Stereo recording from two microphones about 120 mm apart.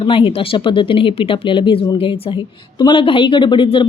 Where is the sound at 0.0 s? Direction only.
45° left (ahead or behind).